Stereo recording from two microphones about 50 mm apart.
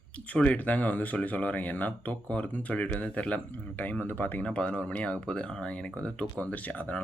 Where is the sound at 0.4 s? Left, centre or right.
Left.